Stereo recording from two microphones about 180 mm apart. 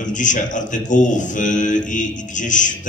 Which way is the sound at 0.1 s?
45° left (ahead or behind).